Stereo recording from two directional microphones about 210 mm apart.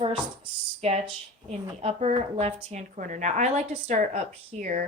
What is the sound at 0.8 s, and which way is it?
A woman's voice, 30° right (ahead or behind).